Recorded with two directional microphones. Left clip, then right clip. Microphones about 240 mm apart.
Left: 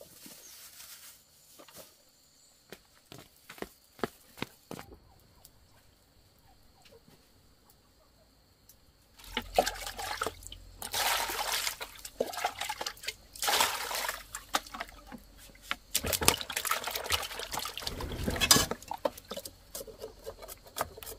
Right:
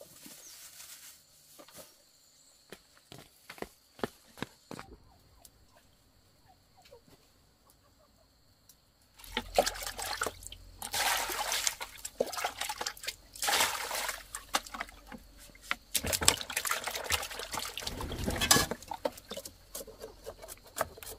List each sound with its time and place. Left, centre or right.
0.0 s a sound: centre
2.7 s walk: centre
3.9 s a sound: centre
9.3 s liquid: centre
10.8 s trickle: centre
12.2 s liquid: centre
13.4 s water: centre
14.5 s a sound: centre
15.9 s water: centre
18.4 s stir: centre
19.0 s rodents: centre